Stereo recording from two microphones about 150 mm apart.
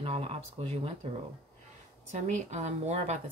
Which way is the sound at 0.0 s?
40° right (ahead or behind).